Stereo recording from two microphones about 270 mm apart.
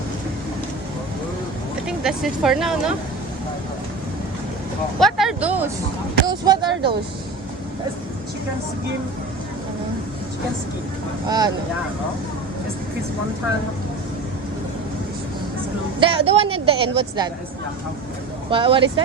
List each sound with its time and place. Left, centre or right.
1.9 s speech: centre
4.9 s speech: centre
11.3 s speech: centre
16.0 s speech: centre
18.5 s speech: centre